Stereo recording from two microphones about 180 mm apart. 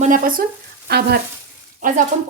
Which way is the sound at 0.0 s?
50° right (ahead or behind).